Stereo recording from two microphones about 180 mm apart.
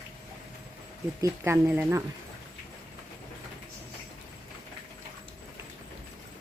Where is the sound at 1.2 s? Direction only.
15° right (ahead or behind).